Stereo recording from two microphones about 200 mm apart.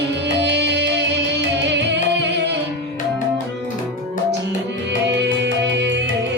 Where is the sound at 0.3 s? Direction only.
60° right (ahead or behind).